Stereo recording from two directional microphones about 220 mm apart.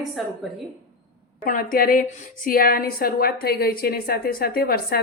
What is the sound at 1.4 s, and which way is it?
A woman's voice, 40° left (ahead or behind).